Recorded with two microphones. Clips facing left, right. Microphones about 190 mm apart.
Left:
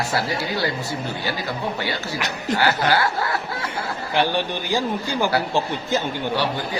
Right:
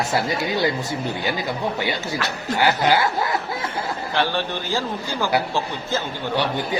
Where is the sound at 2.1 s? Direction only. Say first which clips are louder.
Left 1 dB; 15° left (ahead or behind).